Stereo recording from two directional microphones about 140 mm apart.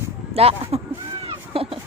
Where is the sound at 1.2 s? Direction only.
40° right (ahead or behind).